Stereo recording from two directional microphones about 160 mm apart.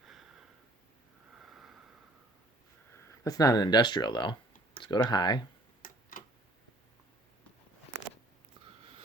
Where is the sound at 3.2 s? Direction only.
20° left (ahead or behind).